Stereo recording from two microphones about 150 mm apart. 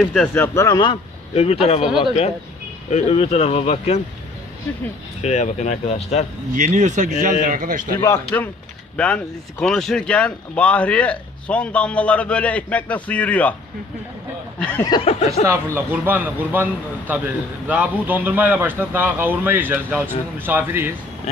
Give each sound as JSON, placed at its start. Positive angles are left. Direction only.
{"t": 0.0, "sound": "speech", "side_deg": 5}
{"t": 0.7, "sound": "speech", "side_deg": 35}
{"t": 2.9, "sound": "speech", "side_deg": 45}
{"t": 5.2, "sound": "speech", "side_deg": 50}
{"t": 6.5, "sound": "speech", "side_deg": -55}
{"t": 8.3, "sound": "speech", "side_deg": 15}
{"t": 14.6, "sound": "speech", "side_deg": 10}
{"t": 14.9, "sound": "speech", "side_deg": 40}
{"t": 15.4, "sound": "a man's voice", "side_deg": -15}
{"t": 17.6, "sound": "a man's voice", "side_deg": -10}